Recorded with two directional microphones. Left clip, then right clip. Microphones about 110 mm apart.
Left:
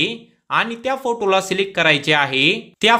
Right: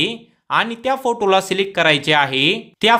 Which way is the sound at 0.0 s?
10° right (ahead or behind).